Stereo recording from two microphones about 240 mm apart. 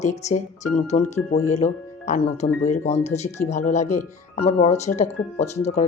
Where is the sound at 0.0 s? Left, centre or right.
Left.